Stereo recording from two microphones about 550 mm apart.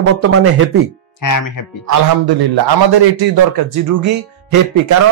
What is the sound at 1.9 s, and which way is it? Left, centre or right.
A man's voice, right.